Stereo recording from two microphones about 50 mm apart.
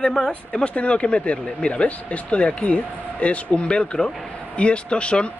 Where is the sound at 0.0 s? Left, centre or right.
Centre.